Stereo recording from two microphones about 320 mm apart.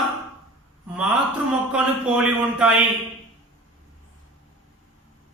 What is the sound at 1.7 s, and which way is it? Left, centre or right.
Speech, centre.